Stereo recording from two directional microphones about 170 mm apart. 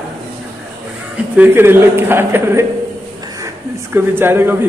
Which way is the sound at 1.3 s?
10° right (ahead or behind).